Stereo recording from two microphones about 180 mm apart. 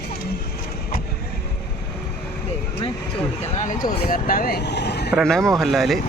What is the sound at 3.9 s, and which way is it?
Speech, 50° left (ahead or behind).